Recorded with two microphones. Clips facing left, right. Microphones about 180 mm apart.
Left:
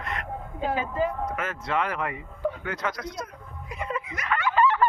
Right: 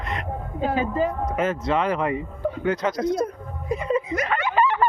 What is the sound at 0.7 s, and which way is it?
Speech, 35° right (ahead or behind).